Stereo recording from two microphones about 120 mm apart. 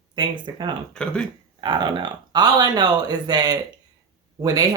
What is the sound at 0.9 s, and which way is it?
Speech, 10° left (ahead or behind).